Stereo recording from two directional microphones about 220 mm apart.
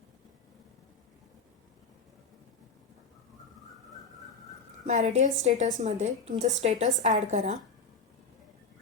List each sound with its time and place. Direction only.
4.9 s a woman's voice: 35° right (ahead or behind)